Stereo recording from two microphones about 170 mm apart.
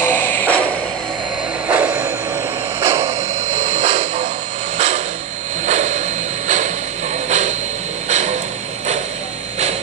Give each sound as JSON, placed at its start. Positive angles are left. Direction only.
{"t": 0.0, "sound": "music", "side_deg": 10}
{"t": 1.7, "sound": "a sound", "side_deg": -10}
{"t": 3.7, "sound": "vehicle", "side_deg": -45}
{"t": 5.7, "sound": "music", "side_deg": -40}
{"t": 7.2, "sound": "vehicle", "side_deg": -40}